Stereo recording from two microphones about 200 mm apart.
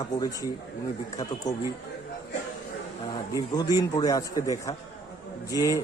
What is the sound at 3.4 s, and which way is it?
A man's voice, 20° left (ahead or behind).